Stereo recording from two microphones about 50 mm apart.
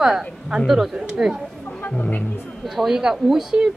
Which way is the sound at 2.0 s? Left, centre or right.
Left.